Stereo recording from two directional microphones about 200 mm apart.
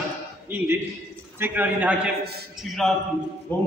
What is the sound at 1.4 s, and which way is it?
A man's voice, 10° right (ahead or behind).